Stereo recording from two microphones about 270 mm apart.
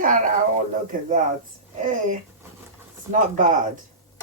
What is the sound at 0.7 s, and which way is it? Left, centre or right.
Speech, right.